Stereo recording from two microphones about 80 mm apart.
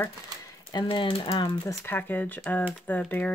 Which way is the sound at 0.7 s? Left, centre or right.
Left.